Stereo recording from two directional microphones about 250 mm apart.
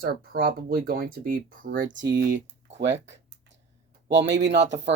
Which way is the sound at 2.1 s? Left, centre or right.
Right.